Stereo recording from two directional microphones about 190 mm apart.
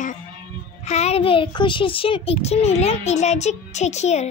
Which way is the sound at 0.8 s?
35° left (ahead or behind).